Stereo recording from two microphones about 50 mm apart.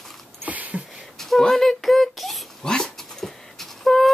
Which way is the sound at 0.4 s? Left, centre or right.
Right.